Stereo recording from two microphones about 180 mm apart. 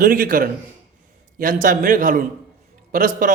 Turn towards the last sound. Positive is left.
turn(degrees=-50)  # may be behind; listen again after turning